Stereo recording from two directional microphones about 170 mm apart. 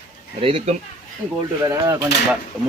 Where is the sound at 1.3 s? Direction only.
20° right (ahead or behind).